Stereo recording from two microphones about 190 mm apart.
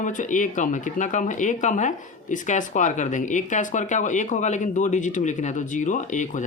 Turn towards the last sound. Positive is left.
turn(degrees=40)  # may be behind; listen again after turning